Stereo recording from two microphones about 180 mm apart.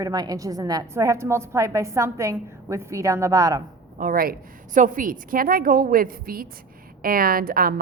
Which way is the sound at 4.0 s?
55° right (ahead or behind).